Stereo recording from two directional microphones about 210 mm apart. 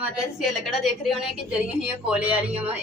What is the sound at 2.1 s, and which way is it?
Speech, 5° right (ahead or behind).